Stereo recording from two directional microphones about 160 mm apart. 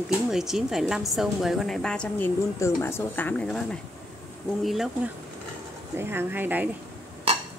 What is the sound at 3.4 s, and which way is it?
Speech, centre (ahead or behind).